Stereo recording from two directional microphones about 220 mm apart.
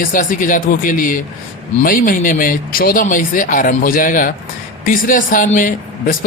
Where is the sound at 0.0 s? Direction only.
40° left (ahead or behind).